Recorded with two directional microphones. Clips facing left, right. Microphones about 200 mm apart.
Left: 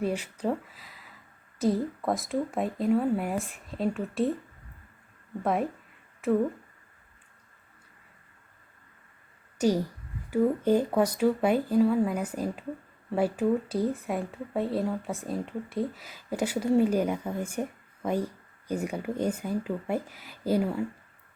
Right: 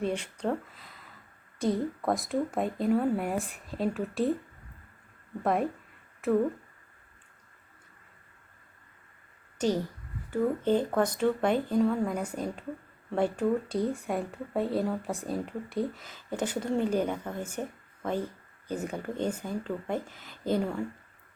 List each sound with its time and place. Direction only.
0.0 s speech: 5° left (ahead or behind)
5.4 s speech: centre (ahead or behind)
9.6 s speech: 10° left (ahead or behind)